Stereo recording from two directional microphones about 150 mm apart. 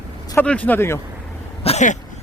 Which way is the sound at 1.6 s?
50° left (ahead or behind).